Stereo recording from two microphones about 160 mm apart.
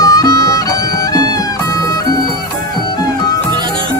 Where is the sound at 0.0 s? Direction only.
20° left (ahead or behind).